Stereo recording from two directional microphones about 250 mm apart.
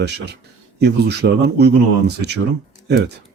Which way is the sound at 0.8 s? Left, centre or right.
Right.